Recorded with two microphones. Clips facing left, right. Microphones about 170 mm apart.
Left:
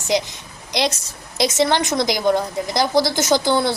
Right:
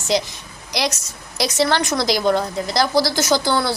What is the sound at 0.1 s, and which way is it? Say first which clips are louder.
A woman's voice: even; 15° left (ahead or behind).